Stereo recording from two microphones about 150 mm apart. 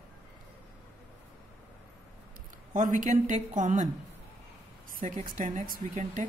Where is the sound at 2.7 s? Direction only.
60° right (ahead or behind).